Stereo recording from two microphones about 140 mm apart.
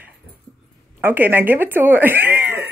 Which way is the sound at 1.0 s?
15° right (ahead or behind).